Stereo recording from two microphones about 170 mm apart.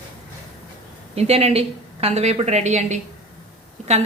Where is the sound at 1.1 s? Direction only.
35° right (ahead or behind).